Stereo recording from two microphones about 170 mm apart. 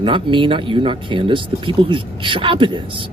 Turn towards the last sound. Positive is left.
turn(degrees=-30)  # may be behind; listen again after turning